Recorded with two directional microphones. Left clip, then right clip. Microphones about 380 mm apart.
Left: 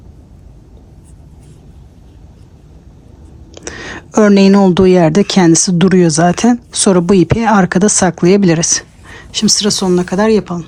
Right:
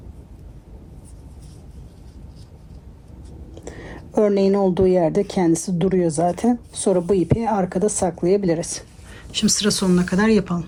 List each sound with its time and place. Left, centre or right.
3.5 s speech: left
9.3 s speech: centre